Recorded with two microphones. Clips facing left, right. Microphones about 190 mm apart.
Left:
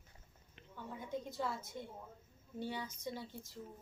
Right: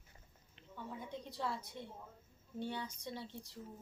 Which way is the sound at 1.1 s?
50° left (ahead or behind).